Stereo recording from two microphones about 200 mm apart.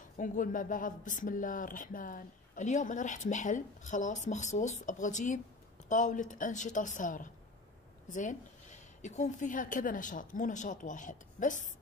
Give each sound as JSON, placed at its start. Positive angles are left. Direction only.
{"t": 0.2, "sound": "speech", "side_deg": 40}